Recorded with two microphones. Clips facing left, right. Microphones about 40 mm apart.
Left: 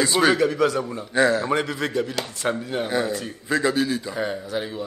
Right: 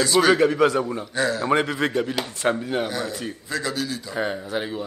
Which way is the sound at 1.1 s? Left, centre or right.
Left.